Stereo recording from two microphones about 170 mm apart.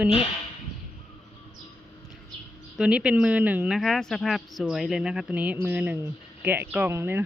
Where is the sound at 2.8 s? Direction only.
5° right (ahead or behind).